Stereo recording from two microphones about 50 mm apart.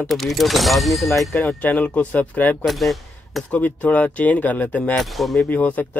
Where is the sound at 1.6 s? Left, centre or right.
Left.